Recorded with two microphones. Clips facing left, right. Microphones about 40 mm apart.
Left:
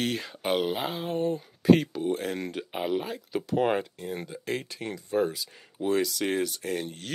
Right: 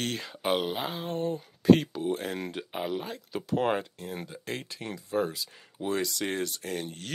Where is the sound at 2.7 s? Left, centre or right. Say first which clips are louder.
Left 5 dB; centre.